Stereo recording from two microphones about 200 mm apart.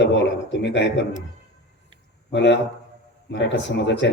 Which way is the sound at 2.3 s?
60° left (ahead or behind).